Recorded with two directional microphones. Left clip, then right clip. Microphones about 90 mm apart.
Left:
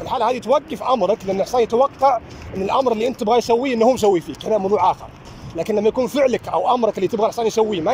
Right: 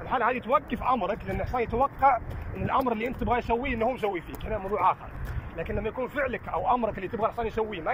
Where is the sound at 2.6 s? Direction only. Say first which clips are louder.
Left 9 dB; 60° left (ahead or behind).